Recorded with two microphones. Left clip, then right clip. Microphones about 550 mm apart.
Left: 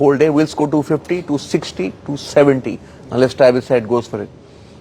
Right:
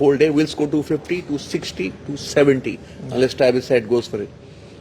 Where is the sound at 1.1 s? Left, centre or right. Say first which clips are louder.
Left 5 dB; left.